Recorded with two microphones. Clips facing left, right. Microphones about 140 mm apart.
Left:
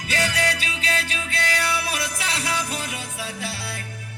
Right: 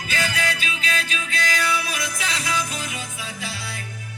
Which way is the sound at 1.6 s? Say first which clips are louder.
Right 1 dB; 65° left (ahead or behind).